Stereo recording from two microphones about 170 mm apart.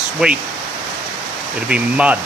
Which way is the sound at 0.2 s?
5° right (ahead or behind).